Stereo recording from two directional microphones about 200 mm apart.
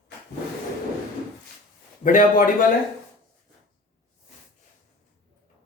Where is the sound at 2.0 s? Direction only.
45° left (ahead or behind).